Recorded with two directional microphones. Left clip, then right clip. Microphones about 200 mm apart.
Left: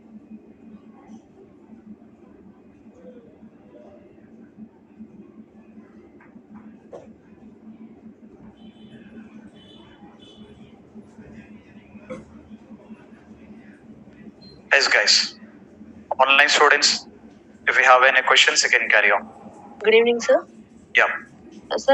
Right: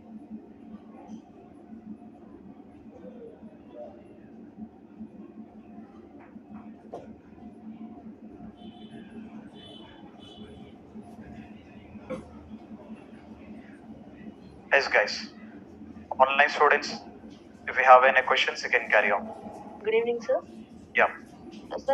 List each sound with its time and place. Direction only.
14.7 s a man's voice: 45° left (ahead or behind)